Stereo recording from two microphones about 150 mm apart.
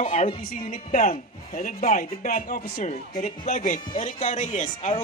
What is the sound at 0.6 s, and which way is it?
A man's voice, 45° left (ahead or behind).